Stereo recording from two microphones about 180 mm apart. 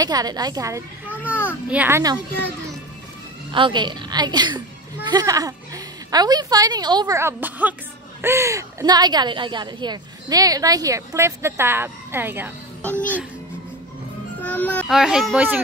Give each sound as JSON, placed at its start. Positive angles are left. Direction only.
{"t": 0.0, "sound": "a woman's voice", "side_deg": -20}
{"t": 1.2, "sound": "children playing", "side_deg": 10}
{"t": 1.7, "sound": "speech", "side_deg": -10}
{"t": 3.5, "sound": "a woman's voice", "side_deg": -25}
{"t": 14.4, "sound": "music", "side_deg": 10}
{"t": 14.9, "sound": "speech", "side_deg": -5}